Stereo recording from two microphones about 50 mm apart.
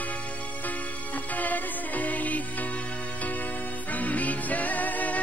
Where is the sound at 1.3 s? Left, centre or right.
Left.